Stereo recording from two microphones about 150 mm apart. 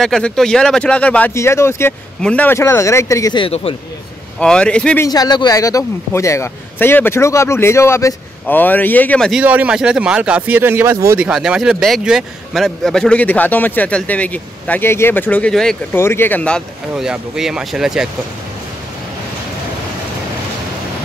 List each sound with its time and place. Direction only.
0.0 s a man's voice: 5° left (ahead or behind); by 3.4 s 20° left (ahead or behind)
3.4 s speech: 40° left (ahead or behind)
4.4 s a man's voice: 5° left (ahead or behind)
5.0 s a man's voice: 25° left (ahead or behind)
9.3 s speech: 10° right (ahead or behind)
11.1 s a man's voice: 5° right (ahead or behind)
15.9 s a man's voice: 15° left (ahead or behind)
16.9 s speech: 5° right (ahead or behind)